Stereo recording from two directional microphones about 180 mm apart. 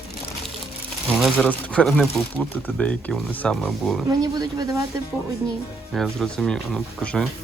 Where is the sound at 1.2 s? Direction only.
5° left (ahead or behind).